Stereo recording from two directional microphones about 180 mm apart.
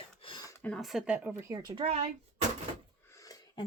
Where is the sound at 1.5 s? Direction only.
20° right (ahead or behind).